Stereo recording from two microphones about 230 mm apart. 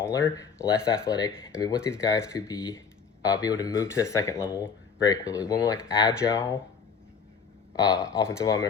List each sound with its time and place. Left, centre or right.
0.7 s speech: centre
7.7 s speech: centre